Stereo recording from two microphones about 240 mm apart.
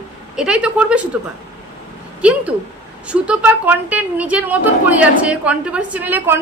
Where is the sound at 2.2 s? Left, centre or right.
Centre.